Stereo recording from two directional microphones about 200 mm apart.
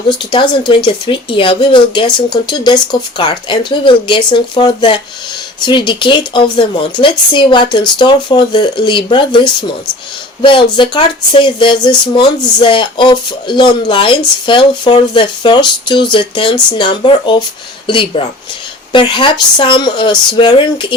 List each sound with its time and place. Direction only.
0.3 s speech: 20° left (ahead or behind)